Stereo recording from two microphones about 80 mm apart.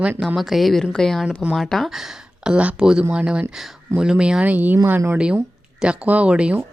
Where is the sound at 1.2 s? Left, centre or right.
Centre.